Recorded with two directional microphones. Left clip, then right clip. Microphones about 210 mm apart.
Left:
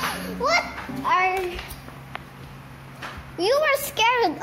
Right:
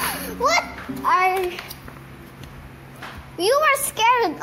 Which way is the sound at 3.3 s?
15° right (ahead or behind).